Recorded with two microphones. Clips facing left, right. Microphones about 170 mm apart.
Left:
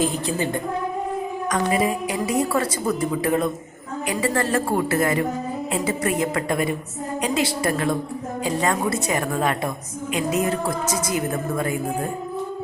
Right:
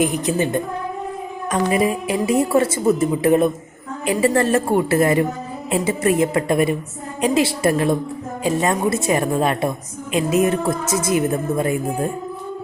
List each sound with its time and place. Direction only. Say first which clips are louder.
0.0 s a woman's voice: right 4 dB; 20° right (ahead or behind)